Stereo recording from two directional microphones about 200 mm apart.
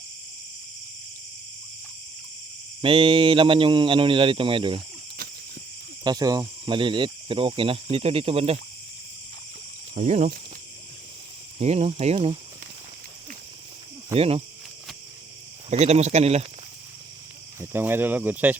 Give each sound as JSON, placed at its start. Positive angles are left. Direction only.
{"t": 2.8, "sound": "speech", "side_deg": -25}
{"t": 6.1, "sound": "speech", "side_deg": -20}
{"t": 9.9, "sound": "speech", "side_deg": -35}
{"t": 11.6, "sound": "speech", "side_deg": -30}
{"t": 14.1, "sound": "speech", "side_deg": -30}
{"t": 15.7, "sound": "speech", "side_deg": -35}
{"t": 17.6, "sound": "speech", "side_deg": -10}